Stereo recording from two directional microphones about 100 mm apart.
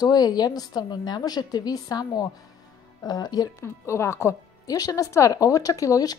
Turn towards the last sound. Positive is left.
turn(degrees=35)  # may be behind; listen again after turning